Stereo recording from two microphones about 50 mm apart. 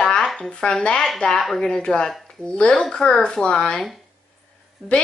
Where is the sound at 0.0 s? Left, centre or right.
Centre.